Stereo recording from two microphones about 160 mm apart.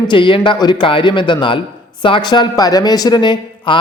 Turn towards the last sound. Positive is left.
turn(degrees=30)  # may be behind; listen again after turning